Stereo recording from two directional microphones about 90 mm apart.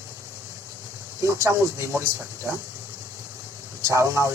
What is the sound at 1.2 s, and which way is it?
Speech, 30° right (ahead or behind).